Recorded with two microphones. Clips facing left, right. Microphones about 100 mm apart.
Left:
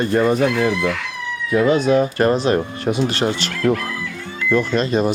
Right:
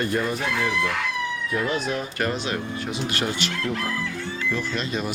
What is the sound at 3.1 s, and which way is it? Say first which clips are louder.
Speech: left 5 dB; 35° left (ahead or behind).